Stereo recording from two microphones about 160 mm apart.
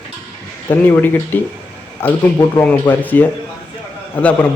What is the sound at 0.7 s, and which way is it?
Speech, 10° left (ahead or behind).